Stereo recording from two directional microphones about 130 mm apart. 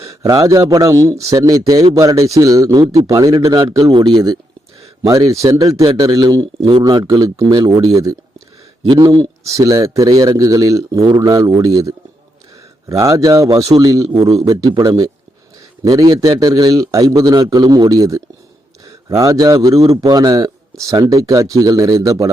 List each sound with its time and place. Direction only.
0.0 s a man's voice: 25° right (ahead or behind)
2.8 s a man's voice: 50° right (ahead or behind)
3.1 s a man's voice: 25° right (ahead or behind)
6.6 s a man's voice: 45° right (ahead or behind)
6.8 s a man's voice: 30° right (ahead or behind)
8.9 s a man's voice: 35° right (ahead or behind)